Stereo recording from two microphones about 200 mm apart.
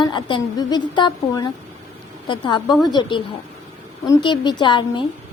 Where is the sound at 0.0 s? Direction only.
25° left (ahead or behind).